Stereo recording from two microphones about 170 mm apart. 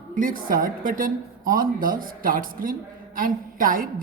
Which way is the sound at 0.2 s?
55° right (ahead or behind).